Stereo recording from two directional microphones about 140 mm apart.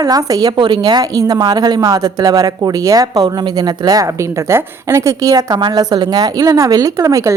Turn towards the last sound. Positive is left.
turn(degrees=-25)  # may be behind; listen again after turning